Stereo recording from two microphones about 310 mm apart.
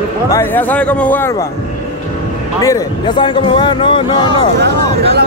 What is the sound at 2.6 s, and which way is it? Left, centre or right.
A man's voice, centre.